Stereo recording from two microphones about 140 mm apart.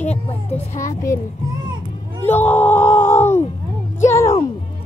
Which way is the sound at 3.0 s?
55° left (ahead or behind).